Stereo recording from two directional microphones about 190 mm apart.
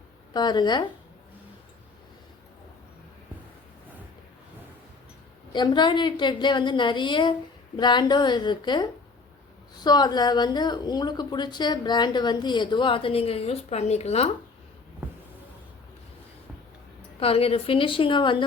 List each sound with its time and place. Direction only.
0.3 s a woman's voice: 25° left (ahead or behind)
5.5 s a woman's voice: 25° left (ahead or behind)
17.2 s a woman's voice: 30° left (ahead or behind)